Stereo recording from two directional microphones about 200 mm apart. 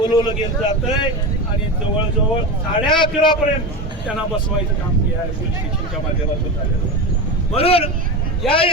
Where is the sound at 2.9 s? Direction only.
25° left (ahead or behind).